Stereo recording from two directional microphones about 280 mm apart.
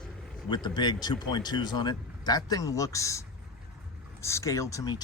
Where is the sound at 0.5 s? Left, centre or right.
Centre.